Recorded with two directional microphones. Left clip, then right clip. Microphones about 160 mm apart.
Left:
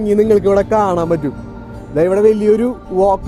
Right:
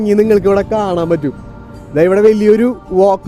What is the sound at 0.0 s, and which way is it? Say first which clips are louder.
Speech: right 1 dB; 40° right (ahead or behind).